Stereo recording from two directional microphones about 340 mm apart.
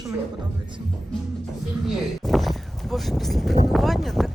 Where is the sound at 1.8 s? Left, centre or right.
Centre.